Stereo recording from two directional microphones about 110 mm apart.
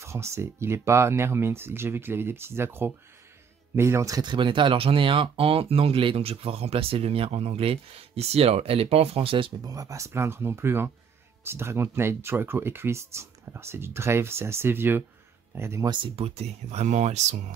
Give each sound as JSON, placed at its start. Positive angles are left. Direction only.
{"t": 0.0, "sound": "speech", "side_deg": -25}
{"t": 9.6, "sound": "speech", "side_deg": -30}
{"t": 15.9, "sound": "speech", "side_deg": -55}